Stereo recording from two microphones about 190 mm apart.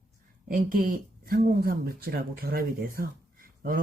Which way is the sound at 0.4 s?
45° right (ahead or behind).